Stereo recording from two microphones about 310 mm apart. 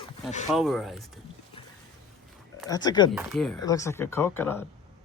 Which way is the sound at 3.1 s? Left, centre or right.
Centre.